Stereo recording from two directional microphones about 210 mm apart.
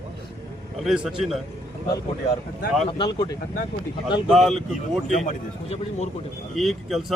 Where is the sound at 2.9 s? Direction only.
20° left (ahead or behind).